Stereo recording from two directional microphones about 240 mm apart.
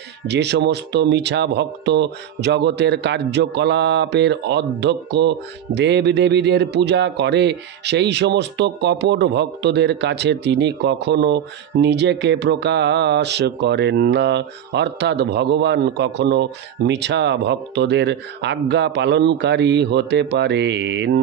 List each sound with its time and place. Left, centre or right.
0.3 s a man's voice: right